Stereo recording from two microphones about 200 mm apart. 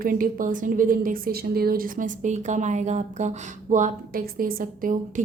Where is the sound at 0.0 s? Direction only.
45° right (ahead or behind).